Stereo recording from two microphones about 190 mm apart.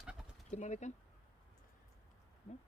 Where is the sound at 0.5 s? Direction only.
40° left (ahead or behind).